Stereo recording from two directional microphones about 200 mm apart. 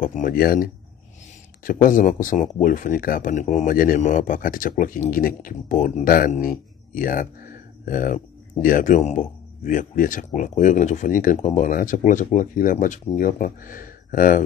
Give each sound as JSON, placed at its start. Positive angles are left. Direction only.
{"t": 0.0, "sound": "speech", "side_deg": 40}